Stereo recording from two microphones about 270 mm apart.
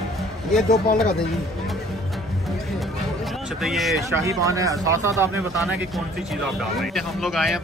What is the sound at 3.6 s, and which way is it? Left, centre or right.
Speech, centre.